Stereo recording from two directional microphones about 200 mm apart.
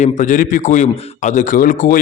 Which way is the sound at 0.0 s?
40° left (ahead or behind).